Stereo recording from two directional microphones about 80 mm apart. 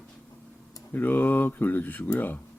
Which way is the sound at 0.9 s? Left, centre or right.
Left.